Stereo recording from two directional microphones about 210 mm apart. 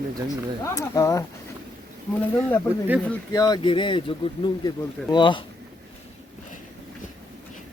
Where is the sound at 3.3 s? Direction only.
20° left (ahead or behind).